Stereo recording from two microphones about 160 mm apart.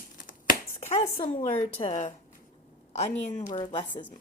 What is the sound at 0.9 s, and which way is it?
Speech, 30° left (ahead or behind).